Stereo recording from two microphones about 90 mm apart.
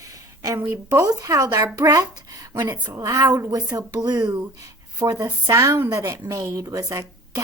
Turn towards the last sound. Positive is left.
turn(degrees=-40)  # may be behind; listen again after turning